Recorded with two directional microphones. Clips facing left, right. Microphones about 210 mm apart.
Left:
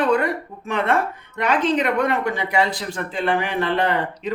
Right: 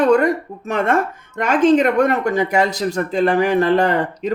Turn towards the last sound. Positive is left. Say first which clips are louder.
# right 4 dB
turn(degrees=-45)  # may be behind; listen again after turning